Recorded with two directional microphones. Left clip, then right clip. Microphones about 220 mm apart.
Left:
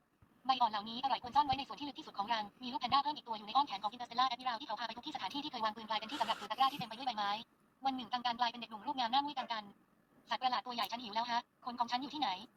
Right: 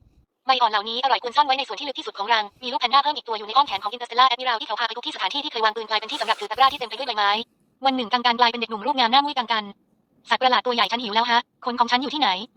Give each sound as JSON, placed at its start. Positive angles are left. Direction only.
{"t": 0.4, "sound": "a woman's voice", "side_deg": -50}